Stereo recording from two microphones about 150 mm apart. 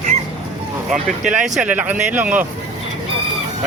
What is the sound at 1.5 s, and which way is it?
Speech, 10° right (ahead or behind).